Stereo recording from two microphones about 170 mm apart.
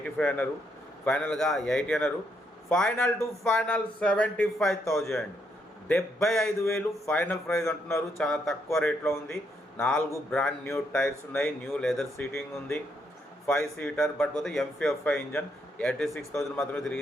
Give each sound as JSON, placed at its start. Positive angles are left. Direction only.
{"t": 0.0, "sound": "speech", "side_deg": 10}
{"t": 6.1, "sound": "speech", "side_deg": 5}
{"t": 8.2, "sound": "speech", "side_deg": 0}
{"t": 16.3, "sound": "speech", "side_deg": 15}